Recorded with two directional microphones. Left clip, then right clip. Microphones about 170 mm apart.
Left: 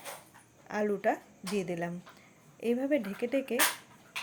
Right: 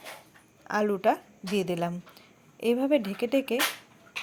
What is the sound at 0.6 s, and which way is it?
Speech, 25° right (ahead or behind).